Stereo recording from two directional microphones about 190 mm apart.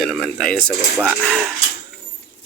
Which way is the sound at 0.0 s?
Centre (ahead or behind).